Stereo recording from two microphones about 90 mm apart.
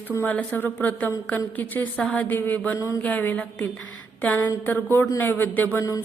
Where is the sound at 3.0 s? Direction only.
15° left (ahead or behind).